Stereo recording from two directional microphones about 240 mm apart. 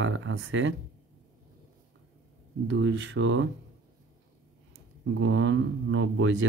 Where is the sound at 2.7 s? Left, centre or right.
Right.